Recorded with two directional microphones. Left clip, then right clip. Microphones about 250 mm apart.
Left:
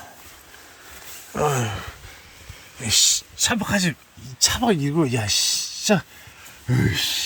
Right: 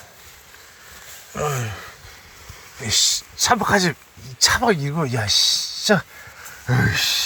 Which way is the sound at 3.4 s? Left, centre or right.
Centre.